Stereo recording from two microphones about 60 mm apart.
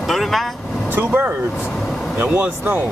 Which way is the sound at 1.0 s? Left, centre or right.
Right.